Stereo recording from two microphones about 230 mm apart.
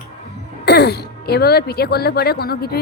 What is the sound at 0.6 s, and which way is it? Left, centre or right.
Speech, left.